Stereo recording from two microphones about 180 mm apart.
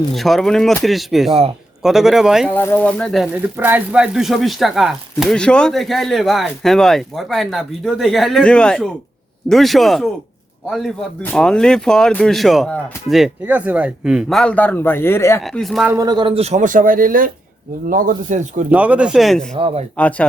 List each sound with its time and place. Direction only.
0.1 s speech: centre (ahead or behind)
2.5 s speech: 10° left (ahead or behind)
3.3 s speech: 10° right (ahead or behind); by 15.4 s 15° left (ahead or behind)
15.4 s speech: centre (ahead or behind)
15.9 s speech: 20° right (ahead or behind); by 18.6 s 45° right (ahead or behind)
18.7 s speech: 5° right (ahead or behind)
19.5 s speech: 30° right (ahead or behind)
20.0 s speech: 10° left (ahead or behind)